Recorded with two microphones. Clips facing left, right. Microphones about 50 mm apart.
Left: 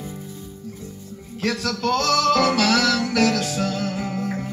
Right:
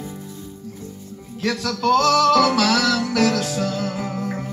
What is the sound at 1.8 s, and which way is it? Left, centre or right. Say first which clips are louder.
Music: right 5 dB; centre.